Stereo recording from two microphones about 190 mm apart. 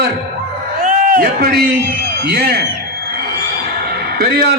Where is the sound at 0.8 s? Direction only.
45° right (ahead or behind).